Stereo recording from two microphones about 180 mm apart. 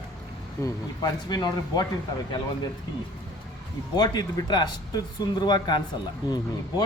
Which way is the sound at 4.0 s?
25° left (ahead or behind).